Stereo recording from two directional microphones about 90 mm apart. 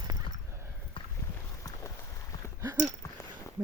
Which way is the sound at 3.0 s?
35° left (ahead or behind).